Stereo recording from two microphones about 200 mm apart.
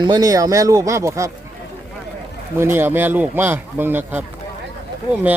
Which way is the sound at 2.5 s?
10° right (ahead or behind).